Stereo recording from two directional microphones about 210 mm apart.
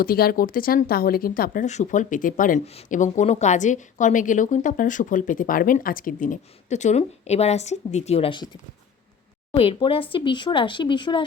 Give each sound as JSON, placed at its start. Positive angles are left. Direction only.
{"t": 0.0, "sound": "speech", "side_deg": 45}
{"t": 9.5, "sound": "speech", "side_deg": 25}